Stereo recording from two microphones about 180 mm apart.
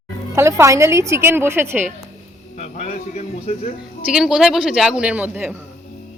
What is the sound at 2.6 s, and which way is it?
A man's voice, 35° left (ahead or behind).